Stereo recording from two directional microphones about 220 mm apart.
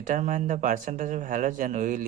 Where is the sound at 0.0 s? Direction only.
35° right (ahead or behind).